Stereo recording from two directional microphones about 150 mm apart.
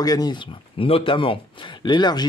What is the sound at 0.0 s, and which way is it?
Speech, 25° left (ahead or behind).